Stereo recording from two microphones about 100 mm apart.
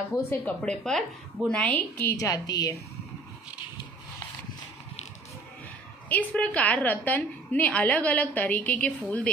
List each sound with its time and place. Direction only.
0.5 s a woman's voice: 10° left (ahead or behind)
2.1 s a woman's voice: 40° left (ahead or behind)
6.0 s a woman's voice: 15° left (ahead or behind)